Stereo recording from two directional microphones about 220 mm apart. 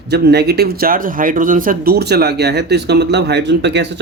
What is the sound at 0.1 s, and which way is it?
Speech, 45° right (ahead or behind).